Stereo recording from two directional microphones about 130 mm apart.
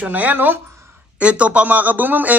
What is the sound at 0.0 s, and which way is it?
A man's voice, 10° right (ahead or behind).